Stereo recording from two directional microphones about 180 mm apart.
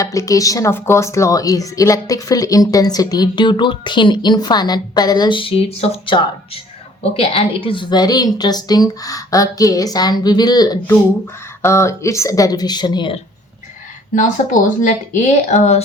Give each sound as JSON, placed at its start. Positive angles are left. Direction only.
{"t": 0.0, "sound": "a woman's voice", "side_deg": 20}
{"t": 14.8, "sound": "speech", "side_deg": 45}